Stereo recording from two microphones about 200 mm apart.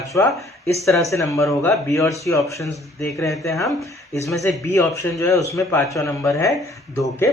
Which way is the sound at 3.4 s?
15° left (ahead or behind).